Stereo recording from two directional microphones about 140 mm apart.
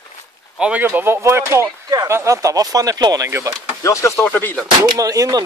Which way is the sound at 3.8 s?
20° left (ahead or behind).